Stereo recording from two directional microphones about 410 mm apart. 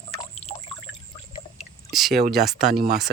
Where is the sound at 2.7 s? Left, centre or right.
Right.